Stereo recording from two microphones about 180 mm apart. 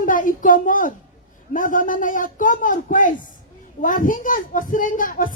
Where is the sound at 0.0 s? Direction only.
50° left (ahead or behind).